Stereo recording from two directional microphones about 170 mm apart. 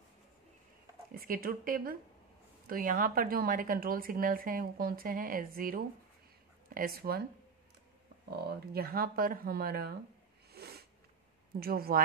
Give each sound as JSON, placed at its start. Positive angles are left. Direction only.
{"t": 1.1, "sound": "speech", "side_deg": -60}
{"t": 8.3, "sound": "speech", "side_deg": -65}
{"t": 10.5, "sound": "a sound", "side_deg": -70}
{"t": 11.6, "sound": "speech", "side_deg": -60}